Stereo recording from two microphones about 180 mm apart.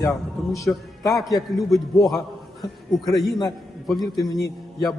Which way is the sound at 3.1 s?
Centre (ahead or behind).